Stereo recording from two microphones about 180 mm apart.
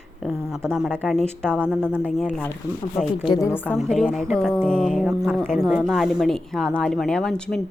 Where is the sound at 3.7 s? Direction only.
Centre (ahead or behind).